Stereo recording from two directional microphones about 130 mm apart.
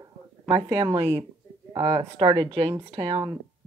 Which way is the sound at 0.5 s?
40° right (ahead or behind).